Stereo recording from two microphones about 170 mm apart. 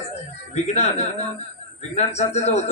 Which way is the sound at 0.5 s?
40° left (ahead or behind).